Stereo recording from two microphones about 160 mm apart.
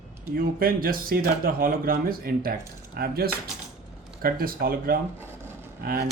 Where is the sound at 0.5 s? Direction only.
65° right (ahead or behind).